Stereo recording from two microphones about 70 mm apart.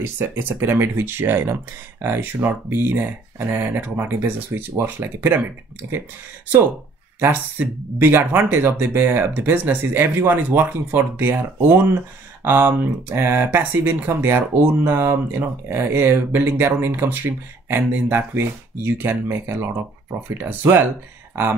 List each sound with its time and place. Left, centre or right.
0.0 s speech: right
7.2 s speech: right